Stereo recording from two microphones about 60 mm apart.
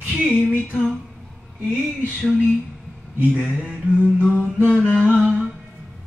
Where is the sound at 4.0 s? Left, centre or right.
Centre.